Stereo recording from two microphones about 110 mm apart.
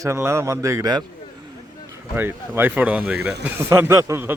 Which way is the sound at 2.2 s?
20° right (ahead or behind).